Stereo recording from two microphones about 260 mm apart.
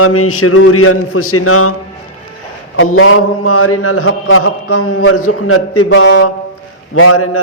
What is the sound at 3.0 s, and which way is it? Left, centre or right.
A man's voice, left.